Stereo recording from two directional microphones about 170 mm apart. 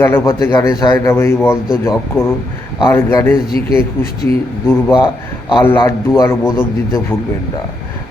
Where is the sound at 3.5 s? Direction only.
65° left (ahead or behind).